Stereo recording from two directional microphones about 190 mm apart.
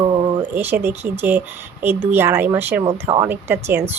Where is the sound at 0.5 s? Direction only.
10° right (ahead or behind).